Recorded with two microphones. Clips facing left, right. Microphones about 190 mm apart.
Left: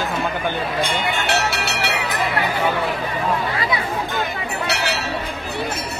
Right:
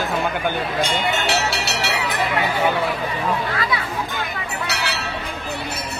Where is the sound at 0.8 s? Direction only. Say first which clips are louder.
Right 1 dB; 55° left (ahead or behind).